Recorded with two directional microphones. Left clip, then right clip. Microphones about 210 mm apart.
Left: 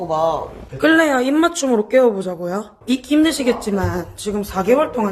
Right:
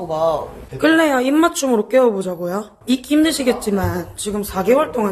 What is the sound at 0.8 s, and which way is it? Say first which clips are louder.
Speech: even; centre (ahead or behind).